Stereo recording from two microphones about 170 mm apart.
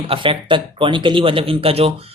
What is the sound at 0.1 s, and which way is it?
Speech, 30° right (ahead or behind).